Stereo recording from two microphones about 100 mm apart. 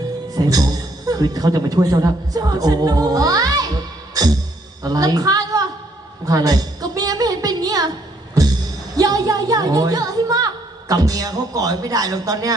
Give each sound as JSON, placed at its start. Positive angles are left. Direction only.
{"t": 0.3, "sound": "a man's voice", "side_deg": -40}
{"t": 4.1, "sound": "music", "side_deg": -40}
{"t": 4.8, "sound": "a woman's voice", "side_deg": -40}
{"t": 6.2, "sound": "a sound", "side_deg": -35}
{"t": 9.0, "sound": "a woman's voice", "side_deg": -40}